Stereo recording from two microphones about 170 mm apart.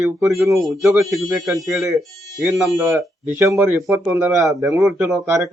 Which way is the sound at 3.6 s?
10° right (ahead or behind).